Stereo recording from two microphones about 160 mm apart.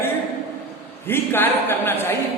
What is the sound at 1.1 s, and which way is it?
Speech, 15° left (ahead or behind).